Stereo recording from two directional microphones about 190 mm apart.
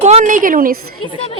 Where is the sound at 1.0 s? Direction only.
25° left (ahead or behind).